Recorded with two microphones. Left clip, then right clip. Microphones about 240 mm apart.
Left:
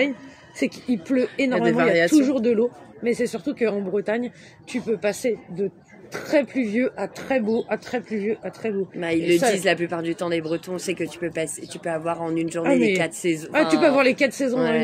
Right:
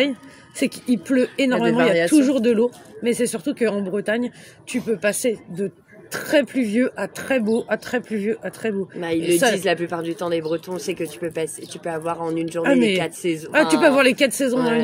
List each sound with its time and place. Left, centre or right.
0.6 s speech: right
9.0 s speech: centre
13.5 s speech: right